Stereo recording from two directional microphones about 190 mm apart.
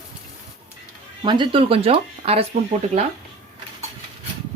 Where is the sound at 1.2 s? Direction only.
25° right (ahead or behind).